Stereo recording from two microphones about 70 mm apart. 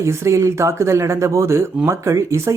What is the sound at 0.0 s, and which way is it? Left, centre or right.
Speech, right.